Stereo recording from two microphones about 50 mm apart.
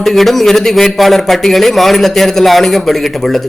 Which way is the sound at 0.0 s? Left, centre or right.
Centre.